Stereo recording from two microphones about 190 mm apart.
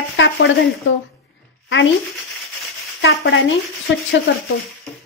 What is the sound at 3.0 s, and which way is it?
Speech, 65° left (ahead or behind).